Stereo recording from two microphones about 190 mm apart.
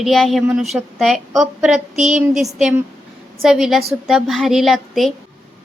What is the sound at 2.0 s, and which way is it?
Speech, 40° right (ahead or behind).